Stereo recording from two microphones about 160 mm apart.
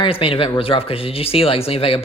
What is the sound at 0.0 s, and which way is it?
Speech, 35° left (ahead or behind).